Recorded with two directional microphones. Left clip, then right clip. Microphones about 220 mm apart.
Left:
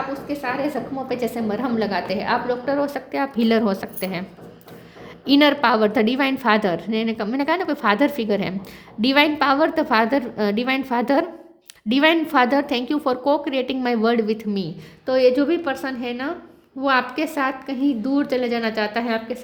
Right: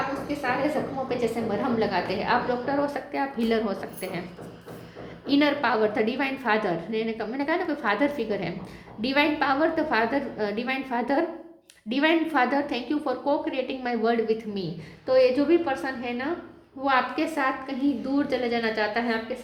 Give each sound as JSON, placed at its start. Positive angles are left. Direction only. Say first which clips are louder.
{"t": 1.0, "sound": "a woman's voice", "louder": "left 2 dB", "side_deg": 45}
{"t": 5.2, "sound": "a woman's voice", "louder": "left 7 dB", "side_deg": 50}